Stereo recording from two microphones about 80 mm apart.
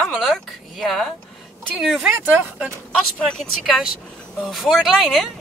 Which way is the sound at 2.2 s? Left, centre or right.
Centre.